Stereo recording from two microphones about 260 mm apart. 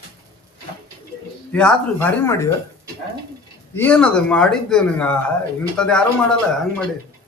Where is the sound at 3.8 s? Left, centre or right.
Centre.